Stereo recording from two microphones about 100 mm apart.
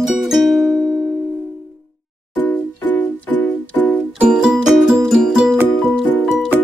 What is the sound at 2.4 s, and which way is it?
Music, 15° left (ahead or behind).